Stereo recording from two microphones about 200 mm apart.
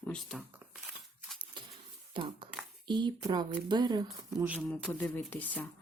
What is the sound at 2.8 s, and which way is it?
Speech, 20° right (ahead or behind).